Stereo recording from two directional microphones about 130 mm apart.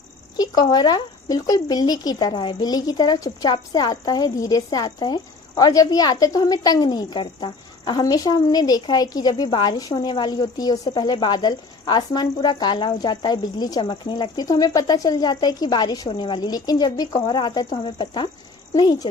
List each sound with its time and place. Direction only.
0.3 s speech: 30° left (ahead or behind)